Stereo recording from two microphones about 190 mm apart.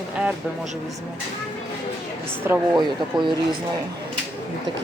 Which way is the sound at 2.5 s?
15° right (ahead or behind).